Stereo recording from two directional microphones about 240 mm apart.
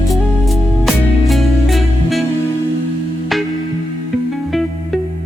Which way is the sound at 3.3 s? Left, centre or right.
Centre.